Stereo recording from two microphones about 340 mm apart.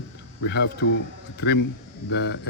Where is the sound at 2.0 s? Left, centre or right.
Left.